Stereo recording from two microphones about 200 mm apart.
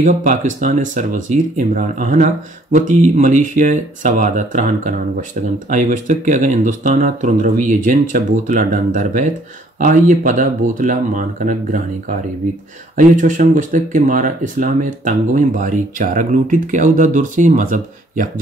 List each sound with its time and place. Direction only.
0.0 s speech: 40° right (ahead or behind)
12.9 s speech: 40° right (ahead or behind)